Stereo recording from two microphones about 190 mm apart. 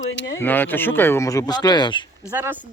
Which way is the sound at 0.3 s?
10° left (ahead or behind).